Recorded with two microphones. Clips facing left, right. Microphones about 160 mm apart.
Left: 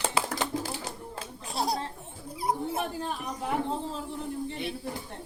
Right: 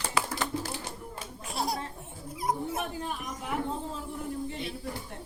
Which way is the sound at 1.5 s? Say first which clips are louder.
Left 2 dB; 35° left (ahead or behind).